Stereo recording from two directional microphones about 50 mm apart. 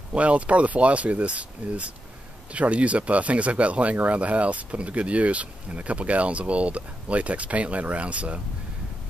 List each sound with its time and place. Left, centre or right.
0.1 s speech: right